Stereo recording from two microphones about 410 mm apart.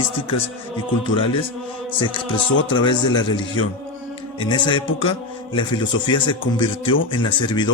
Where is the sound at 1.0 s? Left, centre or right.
Centre.